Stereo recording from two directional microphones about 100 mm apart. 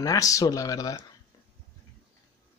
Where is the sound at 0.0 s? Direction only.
35° left (ahead or behind).